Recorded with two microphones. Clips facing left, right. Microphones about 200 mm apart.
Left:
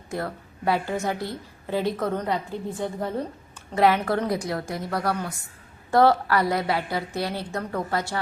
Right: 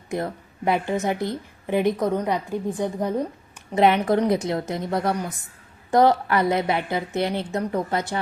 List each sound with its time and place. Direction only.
0.1 s a woman's voice: 20° right (ahead or behind)